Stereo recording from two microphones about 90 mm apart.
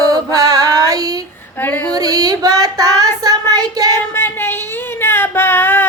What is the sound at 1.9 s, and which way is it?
Child singing, 45° right (ahead or behind).